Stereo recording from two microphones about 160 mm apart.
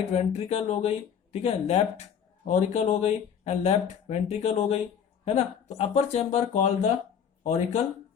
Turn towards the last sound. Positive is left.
turn(degrees=45)  # may be behind; listen again after turning